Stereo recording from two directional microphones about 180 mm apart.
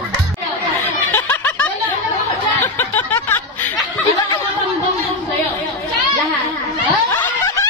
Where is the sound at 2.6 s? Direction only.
10° left (ahead or behind).